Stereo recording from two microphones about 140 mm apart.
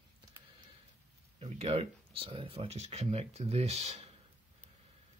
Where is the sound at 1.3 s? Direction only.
45° right (ahead or behind).